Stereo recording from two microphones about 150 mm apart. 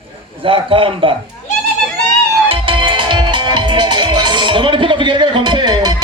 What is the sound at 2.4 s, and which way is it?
Music, 35° right (ahead or behind).